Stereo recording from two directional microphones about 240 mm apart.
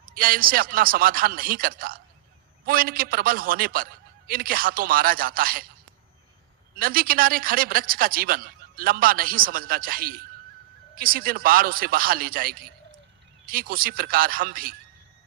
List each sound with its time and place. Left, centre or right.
0.1 s a man's voice: right
6.7 s a man's voice: right